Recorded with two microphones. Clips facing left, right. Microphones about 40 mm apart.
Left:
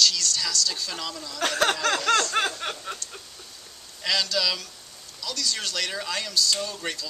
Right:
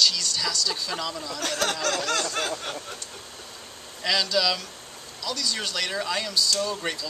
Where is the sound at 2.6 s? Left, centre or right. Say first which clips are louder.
Left 2 dB; left.